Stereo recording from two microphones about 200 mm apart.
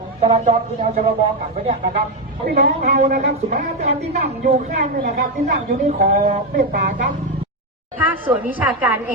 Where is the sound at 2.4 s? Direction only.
50° right (ahead or behind).